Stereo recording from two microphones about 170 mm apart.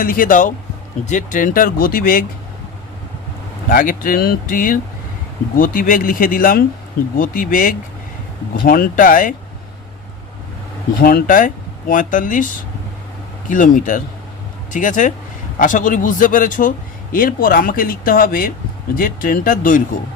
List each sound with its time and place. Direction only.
0.0 s speech: 55° left (ahead or behind)
3.7 s speech: 55° left (ahead or behind)
11.0 s speech: 55° left (ahead or behind)
13.5 s speech: 50° left (ahead or behind)